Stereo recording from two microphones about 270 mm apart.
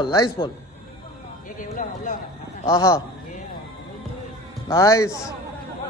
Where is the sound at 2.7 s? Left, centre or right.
Centre.